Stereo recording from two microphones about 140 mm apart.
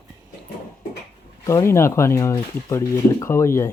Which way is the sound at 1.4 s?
20° left (ahead or behind).